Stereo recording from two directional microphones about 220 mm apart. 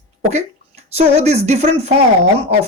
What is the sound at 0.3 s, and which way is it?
Speech, 30° right (ahead or behind).